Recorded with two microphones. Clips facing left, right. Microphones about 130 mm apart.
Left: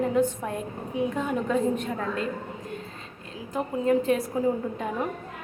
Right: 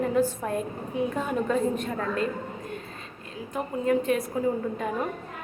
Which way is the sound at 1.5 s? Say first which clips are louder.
Left 1 dB; 15° left (ahead or behind).